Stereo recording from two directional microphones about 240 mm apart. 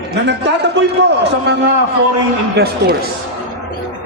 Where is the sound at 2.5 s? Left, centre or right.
Right.